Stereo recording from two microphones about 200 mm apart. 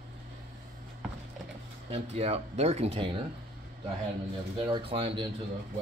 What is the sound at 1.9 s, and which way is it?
Speech, 30° right (ahead or behind).